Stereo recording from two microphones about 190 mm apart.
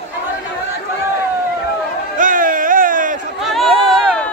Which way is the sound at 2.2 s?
45° right (ahead or behind).